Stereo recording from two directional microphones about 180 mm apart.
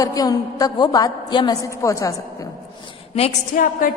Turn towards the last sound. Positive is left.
turn(degrees=35)  # may be behind; listen again after turning